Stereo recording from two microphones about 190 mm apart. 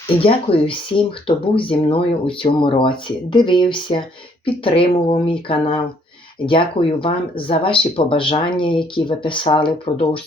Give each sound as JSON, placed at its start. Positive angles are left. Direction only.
{"t": 0.2, "sound": "speech", "side_deg": 30}